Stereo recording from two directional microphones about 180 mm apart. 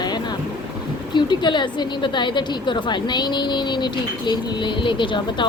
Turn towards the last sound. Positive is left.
turn(degrees=25)  # may be behind; listen again after turning